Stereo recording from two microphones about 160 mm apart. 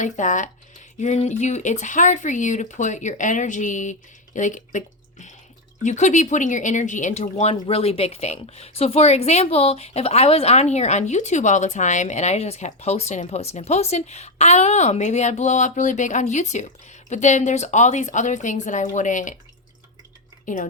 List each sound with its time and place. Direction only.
0.0 s speech: 50° left (ahead or behind)
5.8 s speech: 50° left (ahead or behind)
20.4 s speech: 55° left (ahead or behind)